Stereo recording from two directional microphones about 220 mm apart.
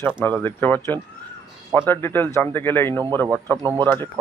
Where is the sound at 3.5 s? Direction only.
20° right (ahead or behind).